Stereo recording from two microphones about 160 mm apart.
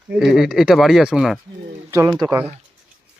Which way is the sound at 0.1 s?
Centre (ahead or behind).